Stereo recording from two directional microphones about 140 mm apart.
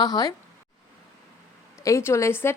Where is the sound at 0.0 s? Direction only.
30° left (ahead or behind).